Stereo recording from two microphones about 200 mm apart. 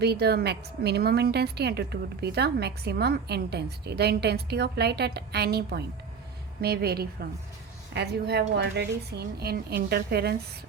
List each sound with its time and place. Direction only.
0.0 s a woman's voice: 55° right (ahead or behind)